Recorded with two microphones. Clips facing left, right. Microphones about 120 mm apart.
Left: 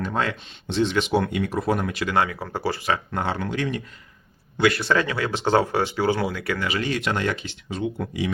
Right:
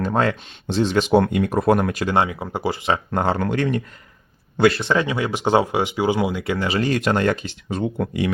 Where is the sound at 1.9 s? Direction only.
40° right (ahead or behind).